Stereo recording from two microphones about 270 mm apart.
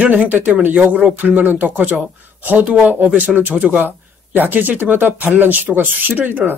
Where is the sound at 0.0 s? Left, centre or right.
Centre.